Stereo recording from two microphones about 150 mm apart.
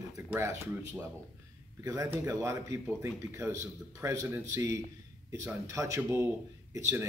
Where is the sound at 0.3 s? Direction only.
15° right (ahead or behind).